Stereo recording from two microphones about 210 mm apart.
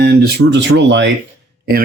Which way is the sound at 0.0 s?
50° right (ahead or behind).